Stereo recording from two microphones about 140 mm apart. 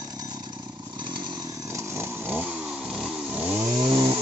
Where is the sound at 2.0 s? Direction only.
15° right (ahead or behind).